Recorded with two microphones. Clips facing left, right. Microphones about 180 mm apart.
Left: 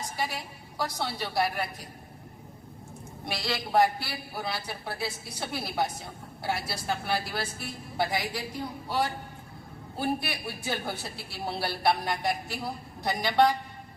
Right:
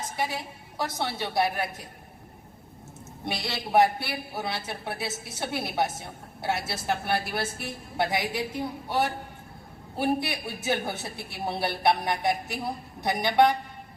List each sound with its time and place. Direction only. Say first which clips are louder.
0.0 s a man's voice: right 2 dB; 25° right (ahead or behind)
3.2 s a man's voice: even; 20° right (ahead or behind)